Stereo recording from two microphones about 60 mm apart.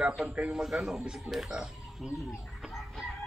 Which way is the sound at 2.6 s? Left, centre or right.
Centre.